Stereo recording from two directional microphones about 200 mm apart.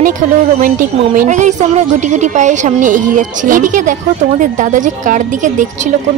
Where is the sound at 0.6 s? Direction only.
40° right (ahead or behind).